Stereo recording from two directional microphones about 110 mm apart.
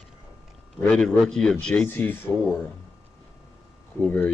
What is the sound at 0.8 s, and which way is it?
A man's voice, 5° left (ahead or behind).